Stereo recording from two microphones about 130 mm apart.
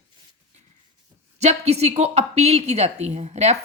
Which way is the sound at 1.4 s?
55° right (ahead or behind).